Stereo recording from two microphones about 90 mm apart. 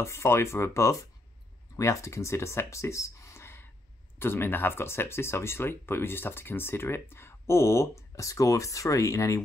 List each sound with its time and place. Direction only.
0.0 s speech: 30° left (ahead or behind)